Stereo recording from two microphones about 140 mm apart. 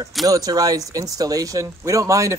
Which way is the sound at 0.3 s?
25° right (ahead or behind).